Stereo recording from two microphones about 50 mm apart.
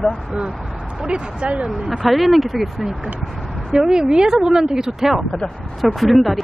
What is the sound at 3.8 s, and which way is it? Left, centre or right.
Speech, centre.